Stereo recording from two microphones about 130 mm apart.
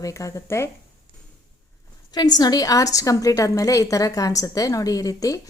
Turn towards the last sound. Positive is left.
turn(degrees=25)  # may be behind; listen again after turning